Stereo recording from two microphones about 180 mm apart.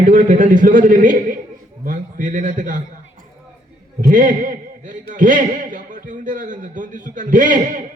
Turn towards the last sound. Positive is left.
turn(degrees=-45)  # may be behind; listen again after turning